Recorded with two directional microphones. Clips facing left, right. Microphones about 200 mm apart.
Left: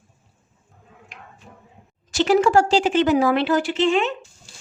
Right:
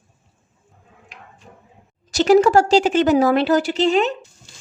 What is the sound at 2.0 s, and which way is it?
A woman's voice, 40° right (ahead or behind).